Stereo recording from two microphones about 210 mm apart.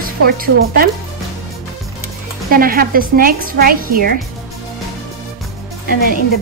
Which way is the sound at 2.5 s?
45° right (ahead or behind).